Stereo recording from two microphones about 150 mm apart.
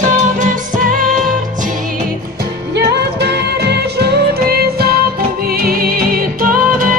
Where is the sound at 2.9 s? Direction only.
90° right; by 6.9 s 70° right (ahead or behind).